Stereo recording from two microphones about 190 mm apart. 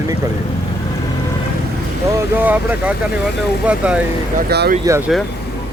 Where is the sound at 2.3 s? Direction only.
10° right (ahead or behind).